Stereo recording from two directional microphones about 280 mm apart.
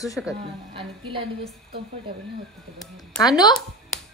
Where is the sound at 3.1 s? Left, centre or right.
Centre.